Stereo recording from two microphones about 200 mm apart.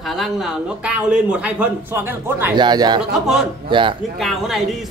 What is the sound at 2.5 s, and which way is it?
Speech, 20° right (ahead or behind).